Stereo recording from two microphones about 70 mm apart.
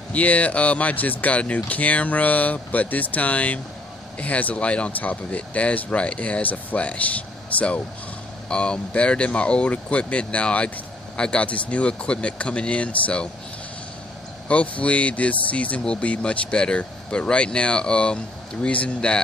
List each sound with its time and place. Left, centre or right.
0.1 s speech: left
14.5 s speech: centre